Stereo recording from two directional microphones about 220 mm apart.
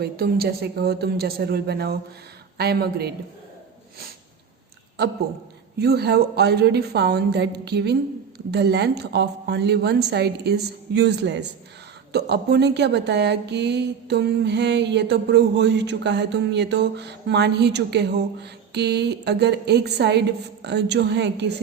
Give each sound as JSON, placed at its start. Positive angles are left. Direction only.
{"t": 0.0, "sound": "speech", "side_deg": -45}
{"t": 5.8, "sound": "speech", "side_deg": -45}